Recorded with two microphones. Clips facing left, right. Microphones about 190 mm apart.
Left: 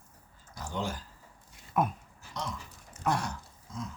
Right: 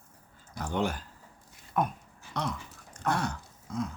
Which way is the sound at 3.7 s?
60° right (ahead or behind).